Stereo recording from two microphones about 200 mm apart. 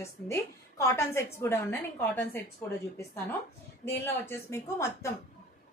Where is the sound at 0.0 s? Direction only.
15° left (ahead or behind).